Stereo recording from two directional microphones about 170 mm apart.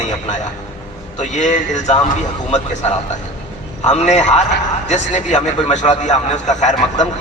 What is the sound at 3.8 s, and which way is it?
A man's voice, 45° left (ahead or behind).